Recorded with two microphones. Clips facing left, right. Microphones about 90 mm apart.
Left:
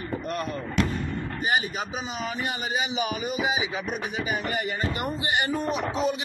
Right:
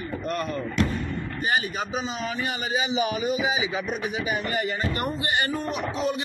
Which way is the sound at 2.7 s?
5° left (ahead or behind).